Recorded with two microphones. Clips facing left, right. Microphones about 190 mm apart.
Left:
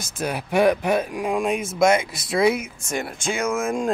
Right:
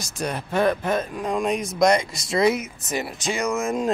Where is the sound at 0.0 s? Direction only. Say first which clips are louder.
Left 1 dB; centre (ahead or behind).